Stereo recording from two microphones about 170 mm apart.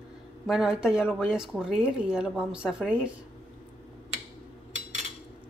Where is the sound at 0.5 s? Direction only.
5° right (ahead or behind).